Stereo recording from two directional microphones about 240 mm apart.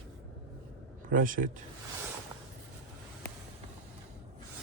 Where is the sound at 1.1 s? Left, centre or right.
Right.